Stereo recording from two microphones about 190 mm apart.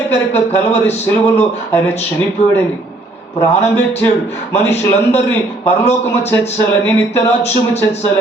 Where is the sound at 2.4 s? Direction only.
35° left (ahead or behind).